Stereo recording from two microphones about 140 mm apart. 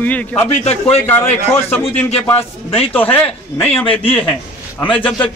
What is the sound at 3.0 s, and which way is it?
A man's voice, 10° left (ahead or behind).